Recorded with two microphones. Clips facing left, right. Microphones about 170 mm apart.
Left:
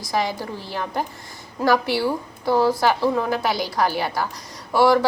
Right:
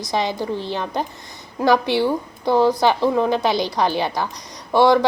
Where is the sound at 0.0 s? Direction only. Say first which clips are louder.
Right 2 dB; 20° right (ahead or behind).